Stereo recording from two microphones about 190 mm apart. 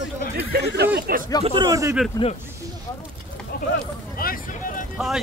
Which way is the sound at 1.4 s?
20° right (ahead or behind).